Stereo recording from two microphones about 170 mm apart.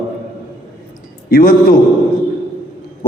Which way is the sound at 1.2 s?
60° left (ahead or behind).